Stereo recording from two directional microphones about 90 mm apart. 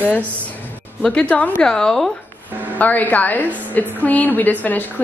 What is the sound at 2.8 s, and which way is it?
A woman's voice, 20° left (ahead or behind).